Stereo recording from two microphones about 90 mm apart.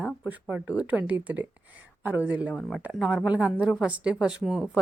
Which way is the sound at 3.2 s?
15° right (ahead or behind).